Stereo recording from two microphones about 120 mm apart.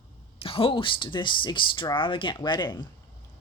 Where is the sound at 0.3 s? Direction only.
50° left (ahead or behind).